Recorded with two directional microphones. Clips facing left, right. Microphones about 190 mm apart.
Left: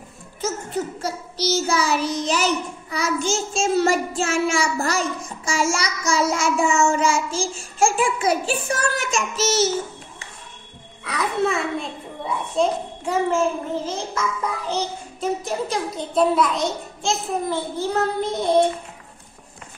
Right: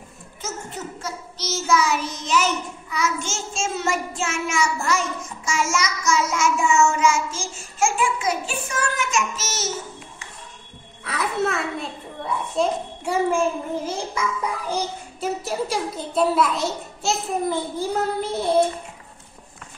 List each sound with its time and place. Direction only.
1.0 s a child's voice: 35° left (ahead or behind)
11.1 s a child's voice: centre (ahead or behind)